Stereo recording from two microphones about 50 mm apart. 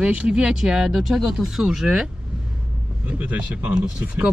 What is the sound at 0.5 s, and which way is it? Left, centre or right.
Speech, centre.